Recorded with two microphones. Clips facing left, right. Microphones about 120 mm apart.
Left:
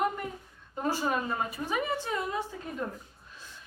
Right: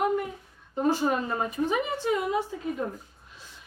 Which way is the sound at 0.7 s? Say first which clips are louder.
Right 5 dB; 20° right (ahead or behind).